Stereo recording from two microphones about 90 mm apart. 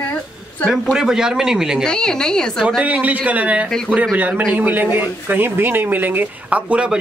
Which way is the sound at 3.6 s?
5° left (ahead or behind).